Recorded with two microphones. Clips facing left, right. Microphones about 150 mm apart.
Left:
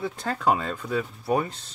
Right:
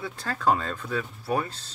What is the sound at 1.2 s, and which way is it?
Speech, 20° left (ahead or behind).